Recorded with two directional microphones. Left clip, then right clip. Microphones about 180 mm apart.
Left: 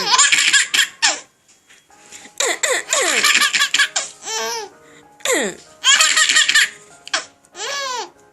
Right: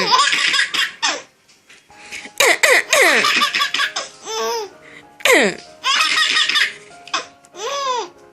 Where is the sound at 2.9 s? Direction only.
10° right (ahead or behind).